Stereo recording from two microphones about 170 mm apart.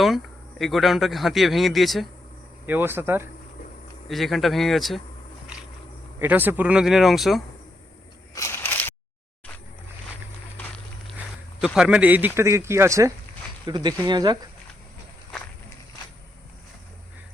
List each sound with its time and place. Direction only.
0.6 s a man's voice: centre (ahead or behind)
2.6 s speech: 10° right (ahead or behind)
4.1 s a man's voice: centre (ahead or behind)
6.1 s a man's voice: 10° right (ahead or behind)
8.4 s a sound: 15° left (ahead or behind)
11.6 s speech: 5° right (ahead or behind); by 14.3 s 25° right (ahead or behind)